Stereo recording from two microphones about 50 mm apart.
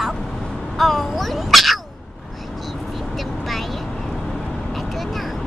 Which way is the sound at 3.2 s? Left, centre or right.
Centre.